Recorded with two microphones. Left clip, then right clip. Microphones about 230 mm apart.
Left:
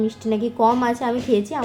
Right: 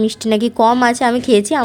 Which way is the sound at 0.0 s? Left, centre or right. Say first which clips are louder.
Right 6 dB; right.